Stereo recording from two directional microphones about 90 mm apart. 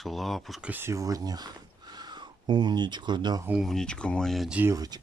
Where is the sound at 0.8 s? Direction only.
35° right (ahead or behind); by 3.4 s 55° right (ahead or behind).